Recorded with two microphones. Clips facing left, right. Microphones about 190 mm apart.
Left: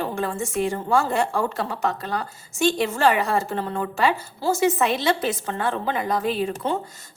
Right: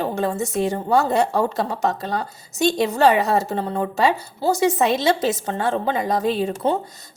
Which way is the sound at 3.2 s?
40° right (ahead or behind).